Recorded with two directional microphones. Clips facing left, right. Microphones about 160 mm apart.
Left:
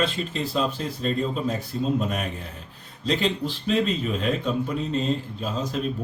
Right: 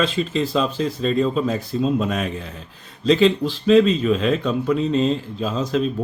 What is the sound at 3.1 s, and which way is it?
Speech, 90° right.